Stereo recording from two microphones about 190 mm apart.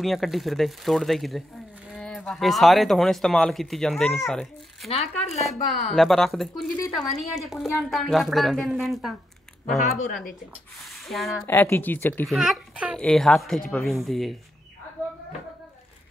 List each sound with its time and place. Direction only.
0.0 s speech: centre (ahead or behind)
4.8 s speech: 30° left (ahead or behind)
5.4 s speech: centre (ahead or behind)
11.1 s speech: centre (ahead or behind)
11.4 s speech: 15° left (ahead or behind)
12.3 s speech: 5° right (ahead or behind)